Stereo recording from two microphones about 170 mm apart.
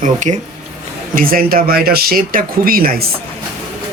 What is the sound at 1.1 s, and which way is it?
Speech, 55° right (ahead or behind).